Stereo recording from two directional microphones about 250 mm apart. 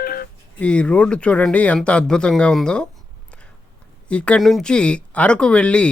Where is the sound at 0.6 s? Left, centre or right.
Centre.